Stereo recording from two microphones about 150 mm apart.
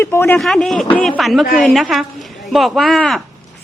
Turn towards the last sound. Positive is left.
turn(degrees=0)  # may be behind; listen again after turning